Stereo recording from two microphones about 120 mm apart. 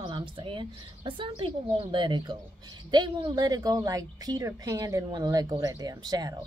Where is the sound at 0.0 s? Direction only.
45° right (ahead or behind).